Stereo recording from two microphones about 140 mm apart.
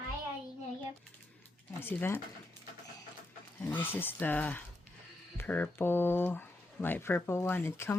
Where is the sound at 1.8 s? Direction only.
15° left (ahead or behind).